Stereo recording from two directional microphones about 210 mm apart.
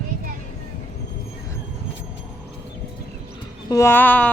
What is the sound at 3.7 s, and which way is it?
Speech, 10° left (ahead or behind).